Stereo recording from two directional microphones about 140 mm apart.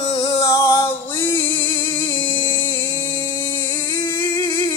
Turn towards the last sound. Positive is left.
turn(degrees=30)  # may be behind; listen again after turning